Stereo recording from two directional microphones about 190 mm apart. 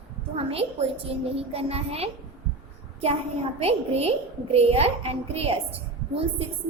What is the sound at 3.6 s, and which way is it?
A woman's voice, 30° right (ahead or behind).